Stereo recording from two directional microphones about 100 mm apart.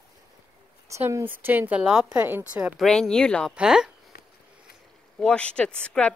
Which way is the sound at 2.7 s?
Centre (ahead or behind).